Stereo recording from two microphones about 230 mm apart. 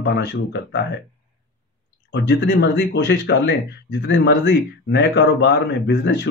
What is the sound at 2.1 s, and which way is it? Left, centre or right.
Speech, left.